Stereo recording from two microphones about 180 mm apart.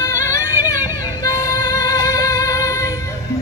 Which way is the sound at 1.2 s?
15° left (ahead or behind).